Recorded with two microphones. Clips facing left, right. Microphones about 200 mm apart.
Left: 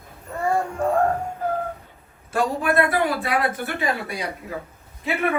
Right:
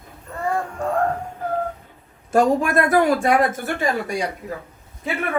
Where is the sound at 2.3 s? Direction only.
45° right (ahead or behind).